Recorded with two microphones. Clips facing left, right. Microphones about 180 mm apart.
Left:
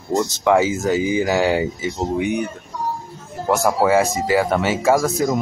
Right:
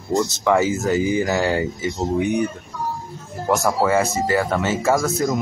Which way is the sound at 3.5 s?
10° left (ahead or behind).